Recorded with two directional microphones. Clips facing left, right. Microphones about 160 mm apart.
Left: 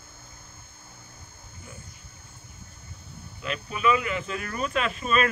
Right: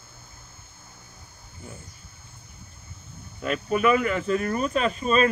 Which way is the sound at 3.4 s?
45° right (ahead or behind).